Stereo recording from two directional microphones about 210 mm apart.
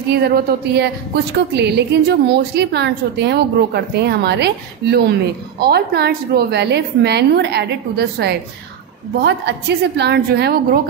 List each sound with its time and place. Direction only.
0.1 s a woman's voice: 50° right (ahead or behind)